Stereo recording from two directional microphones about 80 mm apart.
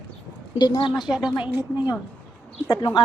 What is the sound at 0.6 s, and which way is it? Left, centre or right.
Speech, left.